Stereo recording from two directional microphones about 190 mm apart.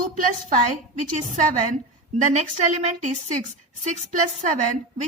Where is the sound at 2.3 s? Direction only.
35° right (ahead or behind).